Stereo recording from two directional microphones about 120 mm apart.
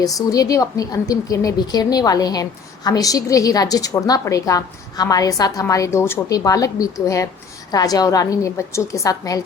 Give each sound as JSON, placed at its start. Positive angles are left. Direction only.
{"t": 0.0, "sound": "a woman's voice", "side_deg": 30}